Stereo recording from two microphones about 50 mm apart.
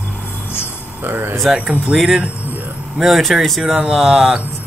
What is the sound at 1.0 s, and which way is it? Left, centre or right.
Speech, right.